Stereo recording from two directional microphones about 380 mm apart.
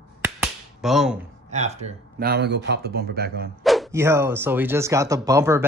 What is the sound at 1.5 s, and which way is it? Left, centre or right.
Speech, centre.